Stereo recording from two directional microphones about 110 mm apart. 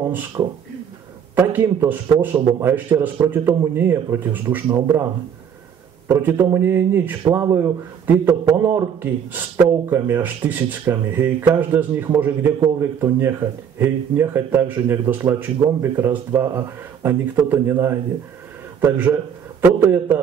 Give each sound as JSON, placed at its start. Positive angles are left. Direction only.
{"t": 0.4, "sound": "speech", "side_deg": -35}
{"t": 1.3, "sound": "a man's voice", "side_deg": -15}
{"t": 6.0, "sound": "a man's voice", "side_deg": -20}
{"t": 7.4, "sound": "a man's voice", "side_deg": -30}